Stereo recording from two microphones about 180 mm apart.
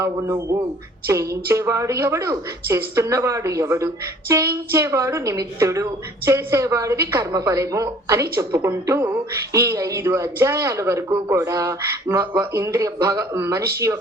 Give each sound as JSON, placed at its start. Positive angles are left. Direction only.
{"t": 0.0, "sound": "a woman's voice", "side_deg": -15}